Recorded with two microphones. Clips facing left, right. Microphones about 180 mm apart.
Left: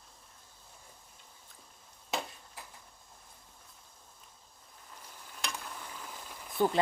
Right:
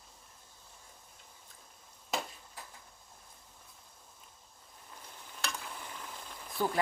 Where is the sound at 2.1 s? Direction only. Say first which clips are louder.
Even; centre (ahead or behind).